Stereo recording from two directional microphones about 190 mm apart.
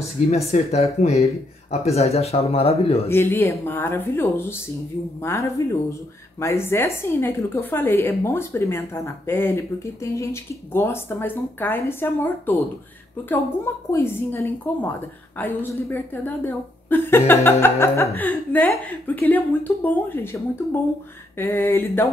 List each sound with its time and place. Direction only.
0.3 s speech: 35° left (ahead or behind)
3.1 s a woman's voice: 10° left (ahead or behind)
13.9 s a woman's voice: 10° left (ahead or behind)
21.4 s a woman's voice: 10° left (ahead or behind)